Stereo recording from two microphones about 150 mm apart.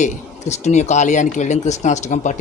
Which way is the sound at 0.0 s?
50° left (ahead or behind).